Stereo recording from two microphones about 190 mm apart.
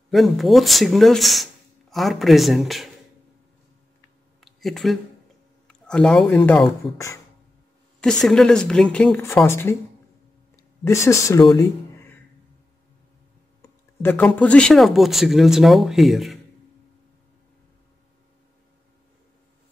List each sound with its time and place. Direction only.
0.1 s speech: centre (ahead or behind)
4.4 s a sound: centre (ahead or behind)
5.7 s speech: 5° left (ahead or behind)
13.6 s speech: 10° left (ahead or behind)